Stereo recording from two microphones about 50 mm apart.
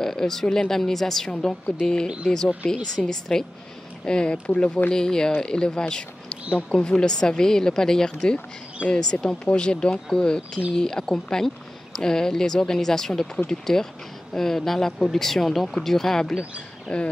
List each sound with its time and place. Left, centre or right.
0.0 s speech: centre